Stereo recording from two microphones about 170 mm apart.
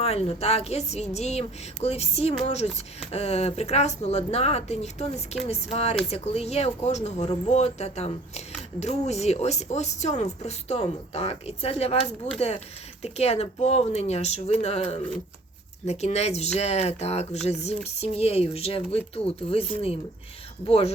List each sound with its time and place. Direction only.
0.0 s speech: 35° left (ahead or behind)
20.7 s speech: 35° left (ahead or behind)